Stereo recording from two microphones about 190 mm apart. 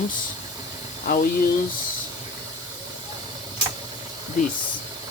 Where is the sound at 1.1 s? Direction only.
50° left (ahead or behind).